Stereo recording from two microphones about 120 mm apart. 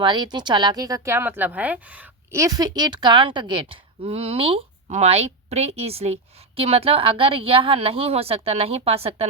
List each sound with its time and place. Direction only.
0.0 s speech: 40° right (ahead or behind); by 2.0 s 10° right (ahead or behind)
2.3 s a woman's voice: 30° right (ahead or behind); by 4.6 s 50° right (ahead or behind)
4.9 s a woman's voice: 65° right (ahead or behind)